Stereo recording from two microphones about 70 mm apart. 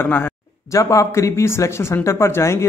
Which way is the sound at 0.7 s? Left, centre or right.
Left.